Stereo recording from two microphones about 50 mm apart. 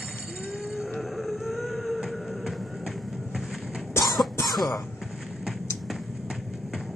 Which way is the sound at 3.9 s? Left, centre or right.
Left.